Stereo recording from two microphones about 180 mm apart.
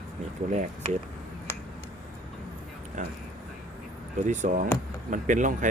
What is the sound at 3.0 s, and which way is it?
Speech, 45° right (ahead or behind).